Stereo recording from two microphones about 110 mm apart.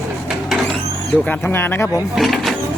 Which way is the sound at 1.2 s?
15° left (ahead or behind).